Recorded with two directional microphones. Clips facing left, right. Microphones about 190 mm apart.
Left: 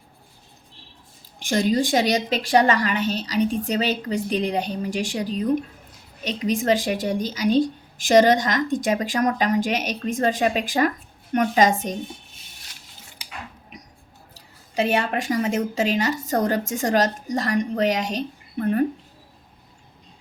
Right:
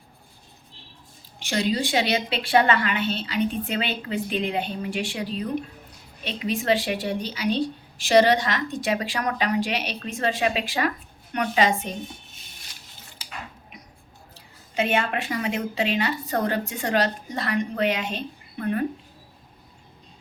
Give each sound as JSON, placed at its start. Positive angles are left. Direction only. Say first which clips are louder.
{"t": 1.4, "sound": "a woman's voice", "louder": "left 4 dB", "side_deg": 45}
{"t": 14.8, "sound": "a woman's voice", "louder": "left 2 dB", "side_deg": 35}